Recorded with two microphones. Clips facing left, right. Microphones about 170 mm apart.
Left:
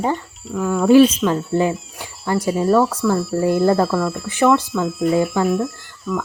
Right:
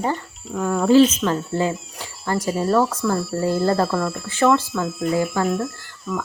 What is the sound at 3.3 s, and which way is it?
Speech, 20° left (ahead or behind).